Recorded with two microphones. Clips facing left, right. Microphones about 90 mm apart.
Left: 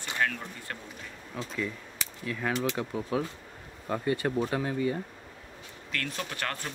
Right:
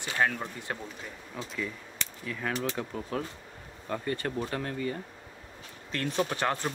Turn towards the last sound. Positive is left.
turn(degrees=-20)  # may be behind; listen again after turning